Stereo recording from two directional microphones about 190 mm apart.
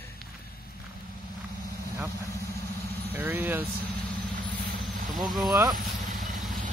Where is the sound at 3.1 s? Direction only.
10° right (ahead or behind).